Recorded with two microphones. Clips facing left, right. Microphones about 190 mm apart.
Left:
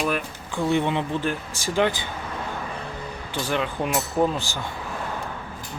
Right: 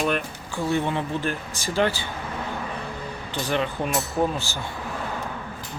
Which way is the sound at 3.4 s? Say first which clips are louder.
Even; 10° left (ahead or behind).